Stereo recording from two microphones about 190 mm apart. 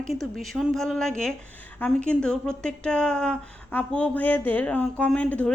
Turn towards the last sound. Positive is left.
turn(degrees=5)  # may be behind; listen again after turning